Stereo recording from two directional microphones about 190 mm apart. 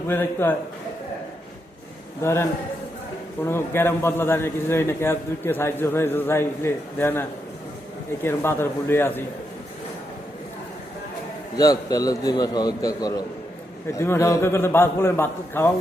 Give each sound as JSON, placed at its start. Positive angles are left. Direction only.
{"t": 0.1, "sound": "a man's voice", "side_deg": 10}
{"t": 2.2, "sound": "a man's voice", "side_deg": 15}
{"t": 11.5, "sound": "a man's voice", "side_deg": 20}